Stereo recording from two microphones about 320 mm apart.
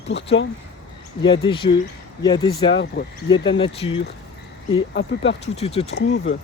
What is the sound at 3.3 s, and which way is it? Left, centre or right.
Speech, centre.